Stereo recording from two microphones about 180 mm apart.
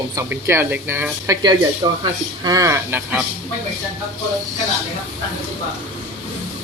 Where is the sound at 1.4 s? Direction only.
25° right (ahead or behind).